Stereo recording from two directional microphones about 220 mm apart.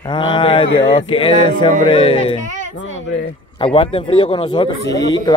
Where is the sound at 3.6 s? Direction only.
25° left (ahead or behind).